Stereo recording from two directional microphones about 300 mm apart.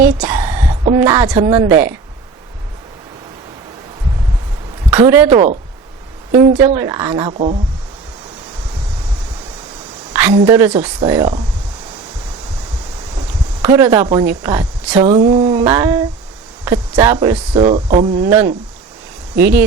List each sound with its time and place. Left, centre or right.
0.0 s a woman's voice: centre
4.9 s speech: centre
6.6 s speech: centre
10.1 s a sound: centre
10.4 s speech: centre
13.6 s speech: centre